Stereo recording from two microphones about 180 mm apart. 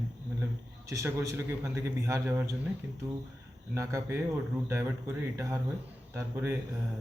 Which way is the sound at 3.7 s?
15° right (ahead or behind).